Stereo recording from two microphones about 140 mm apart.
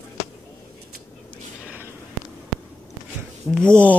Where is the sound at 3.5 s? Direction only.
5° left (ahead or behind).